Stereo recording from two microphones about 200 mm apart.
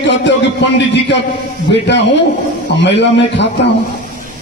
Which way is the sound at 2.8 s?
60° left (ahead or behind).